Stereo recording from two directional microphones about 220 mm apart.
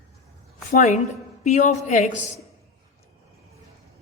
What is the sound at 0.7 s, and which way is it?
A man's voice, 35° left (ahead or behind).